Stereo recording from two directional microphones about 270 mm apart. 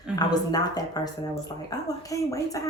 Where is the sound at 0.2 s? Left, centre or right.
Centre.